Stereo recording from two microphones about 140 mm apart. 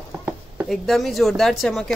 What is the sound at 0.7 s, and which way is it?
Speech, centre (ahead or behind).